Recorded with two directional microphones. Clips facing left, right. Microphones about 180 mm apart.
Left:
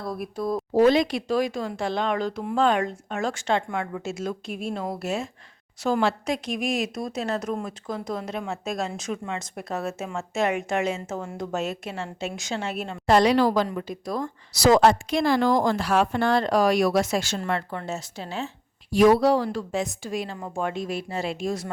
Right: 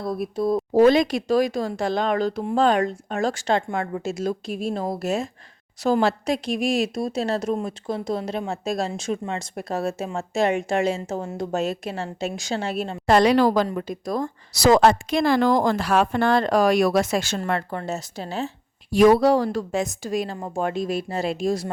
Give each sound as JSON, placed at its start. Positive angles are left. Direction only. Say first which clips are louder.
{"t": 0.0, "sound": "speech", "louder": "right 5 dB", "side_deg": -25}
{"t": 0.7, "sound": "speech", "louder": "right 2 dB", "side_deg": -45}
{"t": 13.1, "sound": "a woman's voice", "louder": "right 2 dB", "side_deg": -55}
{"t": 19.0, "sound": "speech", "louder": "right 2 dB", "side_deg": -50}